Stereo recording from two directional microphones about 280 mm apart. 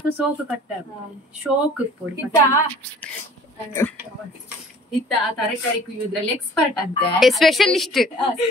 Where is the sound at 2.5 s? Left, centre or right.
Centre.